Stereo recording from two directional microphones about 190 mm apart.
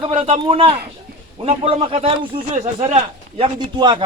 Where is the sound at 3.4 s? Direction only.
25° right (ahead or behind).